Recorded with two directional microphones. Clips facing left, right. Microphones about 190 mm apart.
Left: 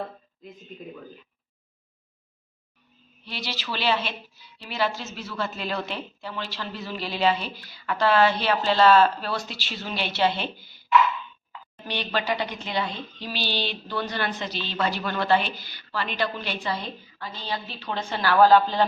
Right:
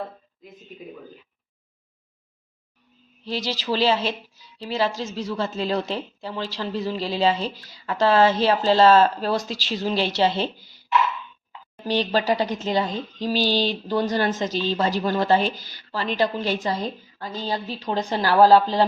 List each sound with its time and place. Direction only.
3.6 s speech: 35° right (ahead or behind)
11.9 s speech: 35° right (ahead or behind)